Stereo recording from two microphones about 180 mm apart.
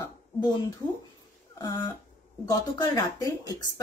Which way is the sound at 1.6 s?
20° left (ahead or behind).